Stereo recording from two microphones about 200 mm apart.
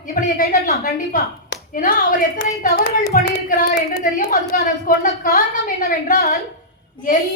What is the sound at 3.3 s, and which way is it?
Speech, 45° left (ahead or behind).